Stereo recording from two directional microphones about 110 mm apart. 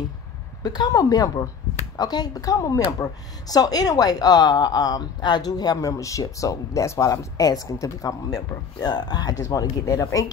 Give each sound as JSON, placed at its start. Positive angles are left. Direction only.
{"t": 0.6, "sound": "speech", "side_deg": 35}